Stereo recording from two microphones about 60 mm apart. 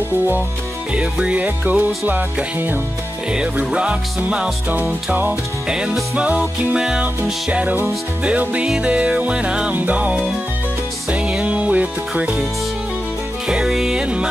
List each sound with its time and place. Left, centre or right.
0.9 s music: centre
3.5 s music: right
5.7 s music: centre
7.5 s music: right
13.5 s music: centre
14.0 s music: centre